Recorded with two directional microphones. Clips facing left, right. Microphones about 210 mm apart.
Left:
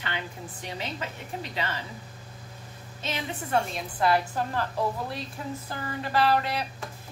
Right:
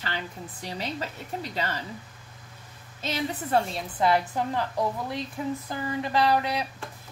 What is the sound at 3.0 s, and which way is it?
Speech, 35° right (ahead or behind).